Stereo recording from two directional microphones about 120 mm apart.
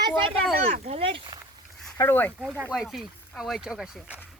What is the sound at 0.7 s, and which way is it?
Speech, 55° right (ahead or behind).